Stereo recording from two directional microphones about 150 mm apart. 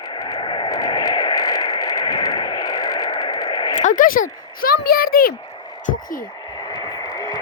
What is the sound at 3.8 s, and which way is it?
A child's voice, 60° left (ahead or behind).